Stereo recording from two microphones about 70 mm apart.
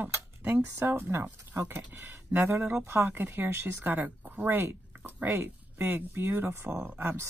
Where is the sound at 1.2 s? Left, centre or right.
Right.